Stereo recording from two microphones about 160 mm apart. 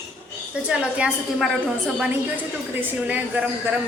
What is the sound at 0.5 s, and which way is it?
A woman's voice, 5° right (ahead or behind).